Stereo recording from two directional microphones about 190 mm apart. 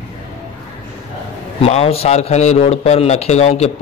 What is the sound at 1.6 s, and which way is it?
Speech, 30° left (ahead or behind).